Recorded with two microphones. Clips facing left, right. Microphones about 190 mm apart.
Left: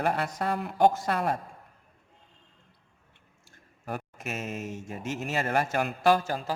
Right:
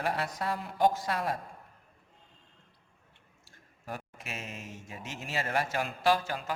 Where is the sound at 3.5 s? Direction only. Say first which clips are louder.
Left 5 dB; 50° left (ahead or behind).